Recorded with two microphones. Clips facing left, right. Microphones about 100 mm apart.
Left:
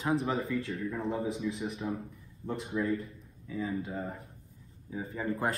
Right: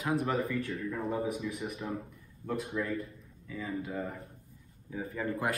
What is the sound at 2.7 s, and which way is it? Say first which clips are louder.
Speech: left 5 dB; 15° left (ahead or behind).